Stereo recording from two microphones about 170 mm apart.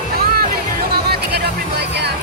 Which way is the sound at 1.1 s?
75° right (ahead or behind).